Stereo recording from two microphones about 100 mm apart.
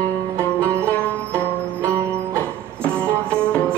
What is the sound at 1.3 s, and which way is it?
Music, 25° right (ahead or behind).